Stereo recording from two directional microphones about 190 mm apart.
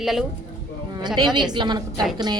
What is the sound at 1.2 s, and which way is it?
A woman's voice, 25° right (ahead or behind).